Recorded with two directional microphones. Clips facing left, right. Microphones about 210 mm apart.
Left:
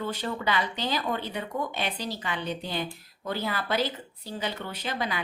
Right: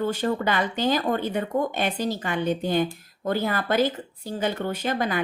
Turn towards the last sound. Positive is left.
turn(degrees=-50)  # may be behind; listen again after turning